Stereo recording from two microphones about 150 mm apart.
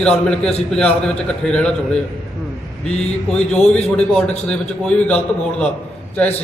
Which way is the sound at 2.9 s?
5° left (ahead or behind).